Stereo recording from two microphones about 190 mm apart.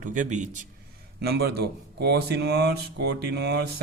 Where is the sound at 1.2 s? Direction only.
55° right (ahead or behind).